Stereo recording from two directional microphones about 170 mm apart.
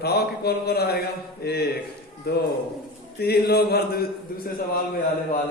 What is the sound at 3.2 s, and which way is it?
Speech, 70° left (ahead or behind).